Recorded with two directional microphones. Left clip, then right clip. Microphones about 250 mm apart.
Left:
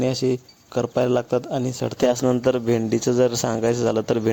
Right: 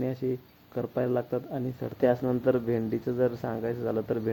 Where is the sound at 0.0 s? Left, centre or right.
Left.